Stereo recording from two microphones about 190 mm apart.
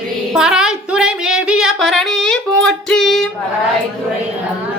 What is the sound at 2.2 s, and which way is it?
Child singing, 5° left (ahead or behind).